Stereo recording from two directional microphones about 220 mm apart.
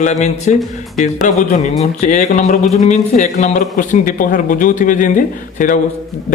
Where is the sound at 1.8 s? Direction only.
30° left (ahead or behind).